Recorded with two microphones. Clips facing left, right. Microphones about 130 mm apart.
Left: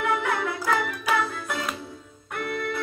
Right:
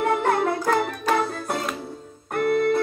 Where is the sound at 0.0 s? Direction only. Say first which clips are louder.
Right 5 dB; 45° right (ahead or behind).